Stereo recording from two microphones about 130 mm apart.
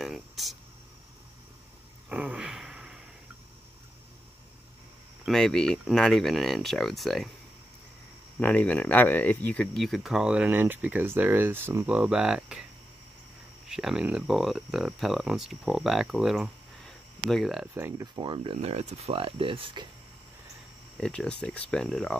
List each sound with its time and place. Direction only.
0.0 s a sound: centre (ahead or behind)
2.0 s a sound: 10° right (ahead or behind)
5.2 s speech: 5° left (ahead or behind)
8.4 s speech: 10° left (ahead or behind); by 12.6 s 5° right (ahead or behind)
13.7 s speech: 5° right (ahead or behind)
17.7 s speech: 15° right (ahead or behind)
18.1 s speech: 40° right (ahead or behind)
21.0 s speech: 5° left (ahead or behind)